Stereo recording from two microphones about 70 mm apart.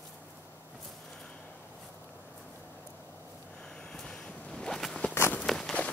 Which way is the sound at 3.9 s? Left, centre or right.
Centre.